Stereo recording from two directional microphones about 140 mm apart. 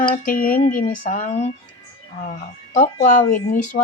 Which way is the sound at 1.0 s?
60° left (ahead or behind).